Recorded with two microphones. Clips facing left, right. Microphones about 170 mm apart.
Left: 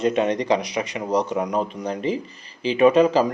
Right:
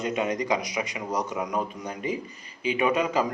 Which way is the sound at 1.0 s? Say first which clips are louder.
Left 9 dB; 30° left (ahead or behind).